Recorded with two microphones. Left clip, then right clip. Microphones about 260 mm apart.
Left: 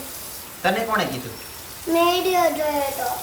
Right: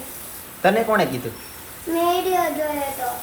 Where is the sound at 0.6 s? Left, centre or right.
Centre.